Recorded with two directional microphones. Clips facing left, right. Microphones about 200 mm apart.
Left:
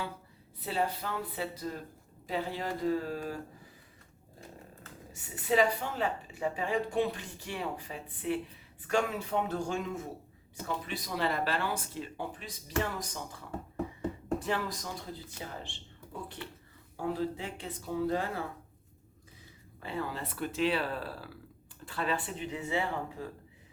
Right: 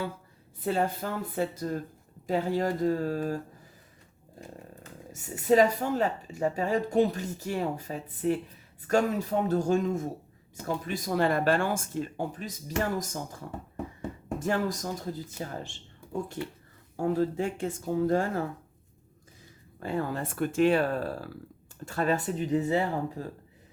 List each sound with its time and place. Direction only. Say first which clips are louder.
0.6 s speech: right 5 dB; 50° right (ahead or behind)
5.1 s speech: right 6 dB; 45° right (ahead or behind)
17.0 s speech: right 7 dB; 45° right (ahead or behind)
19.8 s speech: right 6 dB; 45° right (ahead or behind)